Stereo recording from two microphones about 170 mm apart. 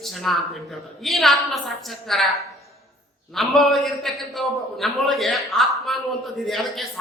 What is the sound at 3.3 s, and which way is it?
A man's voice, centre (ahead or behind).